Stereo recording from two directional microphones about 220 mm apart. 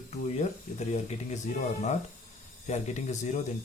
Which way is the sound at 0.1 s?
30° left (ahead or behind).